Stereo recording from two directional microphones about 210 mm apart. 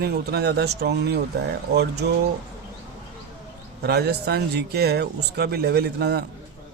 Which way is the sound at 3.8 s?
50° right (ahead or behind).